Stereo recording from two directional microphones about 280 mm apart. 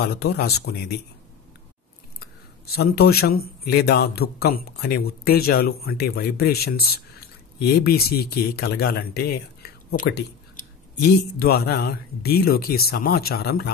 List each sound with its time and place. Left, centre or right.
0.0 s speech: left
2.1 s speech: left